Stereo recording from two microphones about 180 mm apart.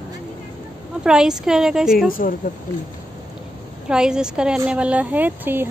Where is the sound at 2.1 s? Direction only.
50° left (ahead or behind).